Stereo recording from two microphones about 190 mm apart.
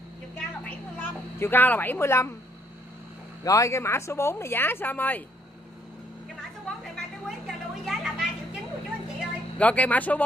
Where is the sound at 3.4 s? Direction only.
15° left (ahead or behind).